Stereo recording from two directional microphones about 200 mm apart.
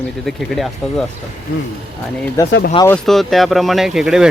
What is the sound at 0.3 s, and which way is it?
Speech, centre (ahead or behind).